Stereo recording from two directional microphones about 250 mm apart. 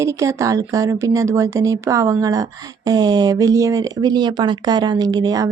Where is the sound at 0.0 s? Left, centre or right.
Centre.